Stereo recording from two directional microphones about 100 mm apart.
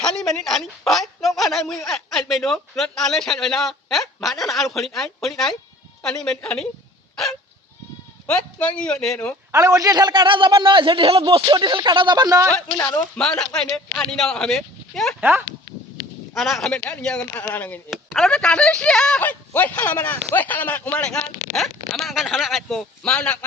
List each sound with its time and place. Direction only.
0.0 s a man's voice: 5° left (ahead or behind)
8.3 s speech: 10° left (ahead or behind)
9.5 s a man's voice: 30° right (ahead or behind)
13.1 s a man's voice: 5° left (ahead or behind)
15.2 s speech: 20° right (ahead or behind)
16.3 s a man's voice: centre (ahead or behind)
17.9 s speech: 5° left (ahead or behind)